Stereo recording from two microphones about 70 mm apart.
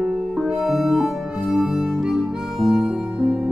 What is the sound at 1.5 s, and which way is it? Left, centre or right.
Harmonica, centre.